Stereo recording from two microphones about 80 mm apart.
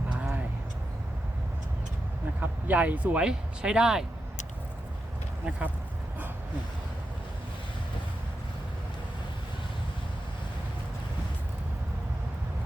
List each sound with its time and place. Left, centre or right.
0.1 s a sound: centre
2.4 s speech: right
5.5 s speech: centre